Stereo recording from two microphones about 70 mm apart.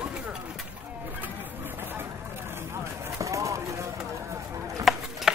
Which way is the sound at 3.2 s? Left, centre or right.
Right.